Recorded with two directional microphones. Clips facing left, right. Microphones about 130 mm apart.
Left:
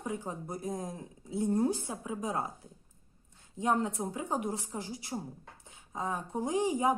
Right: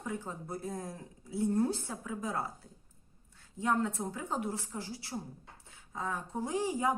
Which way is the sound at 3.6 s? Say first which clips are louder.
Left 1 dB; 20° left (ahead or behind).